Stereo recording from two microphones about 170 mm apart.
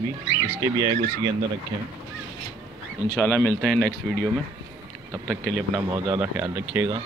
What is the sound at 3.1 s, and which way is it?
Speech, 10° left (ahead or behind).